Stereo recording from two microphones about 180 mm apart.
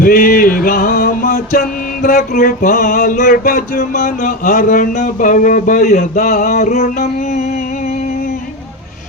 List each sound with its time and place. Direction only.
0.0 s music: 50° left (ahead or behind)